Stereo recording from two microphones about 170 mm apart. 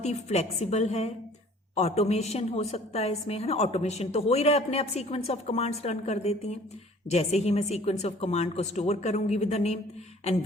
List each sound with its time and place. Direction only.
0.0 s a woman's voice: 40° left (ahead or behind)